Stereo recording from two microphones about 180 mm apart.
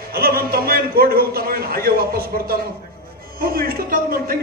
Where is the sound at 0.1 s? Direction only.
55° right (ahead or behind).